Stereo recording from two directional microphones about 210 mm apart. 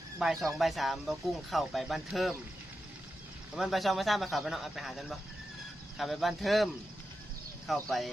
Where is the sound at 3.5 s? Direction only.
Centre (ahead or behind).